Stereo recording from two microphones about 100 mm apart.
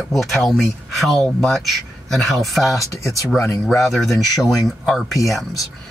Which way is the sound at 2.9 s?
30° left (ahead or behind).